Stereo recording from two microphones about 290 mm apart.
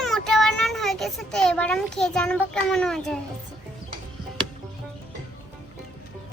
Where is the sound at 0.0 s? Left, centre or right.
Centre.